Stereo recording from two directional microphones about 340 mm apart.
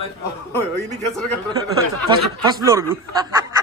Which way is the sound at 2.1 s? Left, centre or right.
Centre.